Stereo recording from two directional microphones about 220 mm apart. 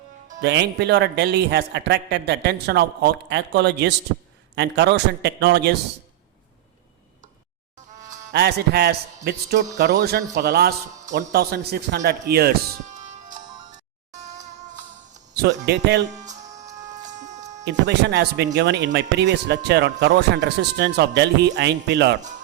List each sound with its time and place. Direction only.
0.4 s a man's voice: 50° right (ahead or behind)
8.3 s a man's voice: 50° right (ahead or behind)
11.1 s music: 50° right (ahead or behind); by 14.4 s 35° right (ahead or behind)
15.4 s a man's voice: 50° right (ahead or behind)
16.0 s music: 35° right (ahead or behind)
17.7 s a man's voice: 50° right (ahead or behind)